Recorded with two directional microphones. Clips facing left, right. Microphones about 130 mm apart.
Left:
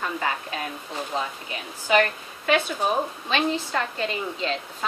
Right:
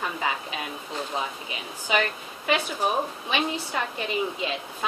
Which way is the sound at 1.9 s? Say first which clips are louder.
Left 5 dB; 15° right (ahead or behind).